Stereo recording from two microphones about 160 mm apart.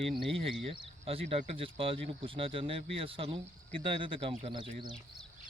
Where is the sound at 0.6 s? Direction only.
35° right (ahead or behind).